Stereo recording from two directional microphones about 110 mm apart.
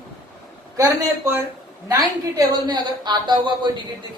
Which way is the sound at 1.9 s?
35° right (ahead or behind).